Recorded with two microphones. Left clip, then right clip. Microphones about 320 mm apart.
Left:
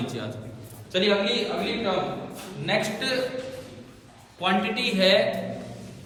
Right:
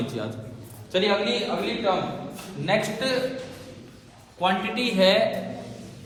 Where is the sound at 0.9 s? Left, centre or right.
Centre.